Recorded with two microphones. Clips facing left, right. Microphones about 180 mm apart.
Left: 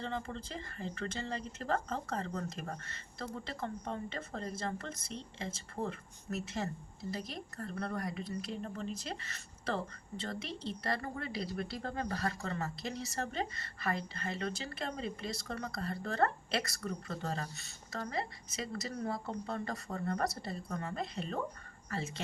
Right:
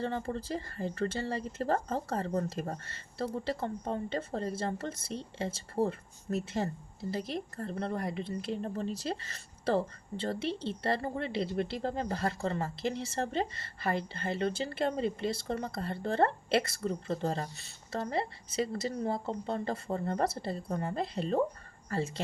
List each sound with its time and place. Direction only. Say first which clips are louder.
0.0 s speech: right 6 dB; 35° right (ahead or behind)